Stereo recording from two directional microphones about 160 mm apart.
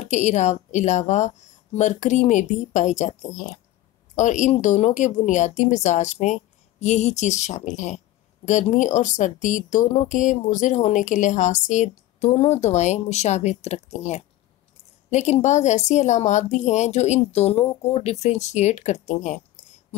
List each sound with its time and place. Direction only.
0.0 s a woman's voice: 45° left (ahead or behind)